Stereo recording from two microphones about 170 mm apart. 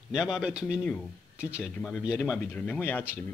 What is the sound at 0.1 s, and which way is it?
Speech, 5° right (ahead or behind).